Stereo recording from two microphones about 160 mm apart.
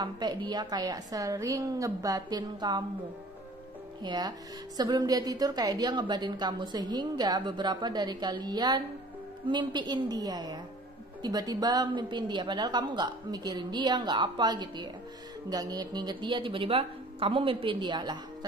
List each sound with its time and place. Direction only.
0.0 s a woman's voice: 30° right (ahead or behind)
4.0 s a woman's voice: 25° right (ahead or behind)